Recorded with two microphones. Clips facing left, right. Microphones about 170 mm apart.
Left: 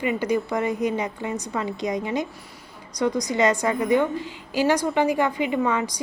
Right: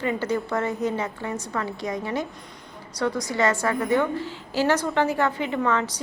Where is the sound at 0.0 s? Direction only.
15° left (ahead or behind).